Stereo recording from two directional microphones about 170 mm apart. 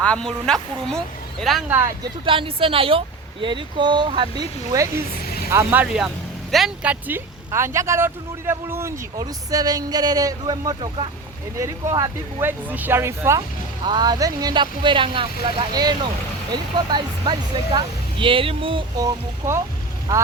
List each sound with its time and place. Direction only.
0.0 s speech: 5° left (ahead or behind)
2.2 s speech: 30° right (ahead or behind)
5.1 s vehicle: 65° left (ahead or behind)
5.5 s speech: 15° right (ahead or behind)